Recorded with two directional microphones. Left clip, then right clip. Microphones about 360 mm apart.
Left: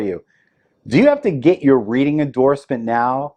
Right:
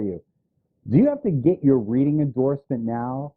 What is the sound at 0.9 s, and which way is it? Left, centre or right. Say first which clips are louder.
Speech: left 7 dB; centre.